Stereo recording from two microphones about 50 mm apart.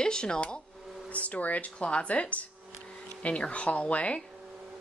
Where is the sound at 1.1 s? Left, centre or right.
Left.